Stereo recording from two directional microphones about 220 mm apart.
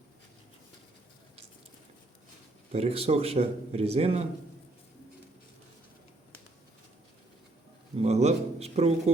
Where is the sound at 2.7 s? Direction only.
25° right (ahead or behind).